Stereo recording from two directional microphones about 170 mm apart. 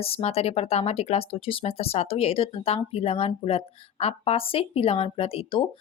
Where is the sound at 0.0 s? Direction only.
35° left (ahead or behind).